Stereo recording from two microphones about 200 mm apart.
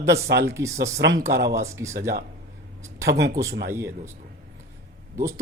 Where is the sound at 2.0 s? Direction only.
50° right (ahead or behind).